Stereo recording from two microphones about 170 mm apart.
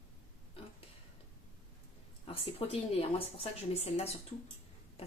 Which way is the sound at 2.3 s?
35° left (ahead or behind).